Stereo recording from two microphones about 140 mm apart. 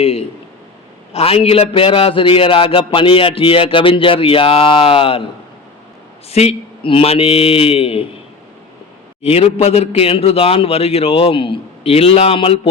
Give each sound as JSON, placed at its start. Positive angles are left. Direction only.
{"t": 0.0, "sound": "a man's voice", "side_deg": 45}
{"t": 6.3, "sound": "a man's voice", "side_deg": 45}
{"t": 9.2, "sound": "a man's voice", "side_deg": 45}